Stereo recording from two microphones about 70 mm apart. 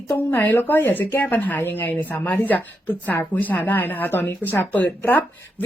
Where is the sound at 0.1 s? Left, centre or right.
Left.